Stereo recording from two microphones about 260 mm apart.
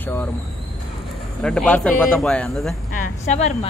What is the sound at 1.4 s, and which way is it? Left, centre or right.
A man's voice, centre.